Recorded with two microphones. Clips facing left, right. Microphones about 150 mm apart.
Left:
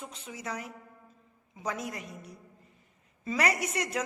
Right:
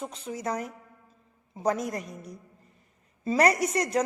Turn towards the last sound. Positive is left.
turn(degrees=-40)  # may be behind; listen again after turning